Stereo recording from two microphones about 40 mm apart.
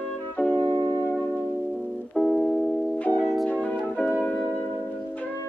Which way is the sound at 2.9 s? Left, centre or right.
Left.